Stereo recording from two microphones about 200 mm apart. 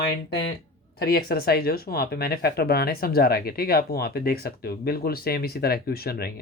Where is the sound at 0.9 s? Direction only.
50° left (ahead or behind).